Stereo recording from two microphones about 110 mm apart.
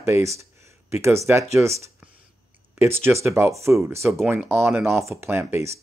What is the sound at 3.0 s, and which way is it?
Speech, 25° right (ahead or behind).